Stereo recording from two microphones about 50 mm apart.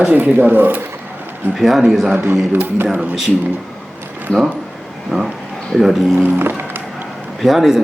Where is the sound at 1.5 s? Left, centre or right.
Centre.